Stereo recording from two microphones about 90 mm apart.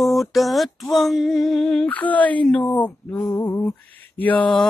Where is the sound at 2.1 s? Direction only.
15° left (ahead or behind).